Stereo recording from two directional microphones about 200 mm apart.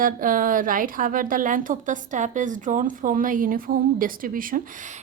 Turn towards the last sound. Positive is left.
turn(degrees=-40)  # may be behind; listen again after turning